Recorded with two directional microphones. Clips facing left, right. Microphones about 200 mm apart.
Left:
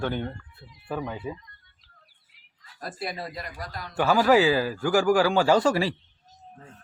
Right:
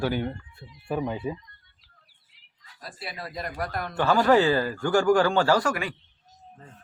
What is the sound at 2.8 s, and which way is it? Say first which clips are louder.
Speech: left 6 dB; 50° left (ahead or behind).